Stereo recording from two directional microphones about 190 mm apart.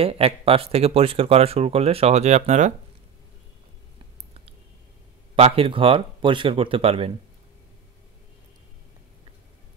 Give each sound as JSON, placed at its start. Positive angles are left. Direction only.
{"t": 0.0, "sound": "speech", "side_deg": -30}
{"t": 5.3, "sound": "speech", "side_deg": -30}